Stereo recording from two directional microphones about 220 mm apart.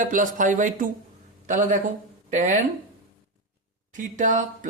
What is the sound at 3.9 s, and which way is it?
Speech, 35° right (ahead or behind).